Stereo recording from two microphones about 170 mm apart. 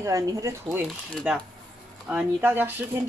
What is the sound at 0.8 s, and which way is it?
Speech, 5° right (ahead or behind).